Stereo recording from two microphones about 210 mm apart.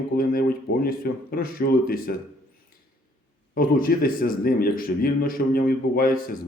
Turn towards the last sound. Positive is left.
turn(degrees=45)  # may be behind; listen again after turning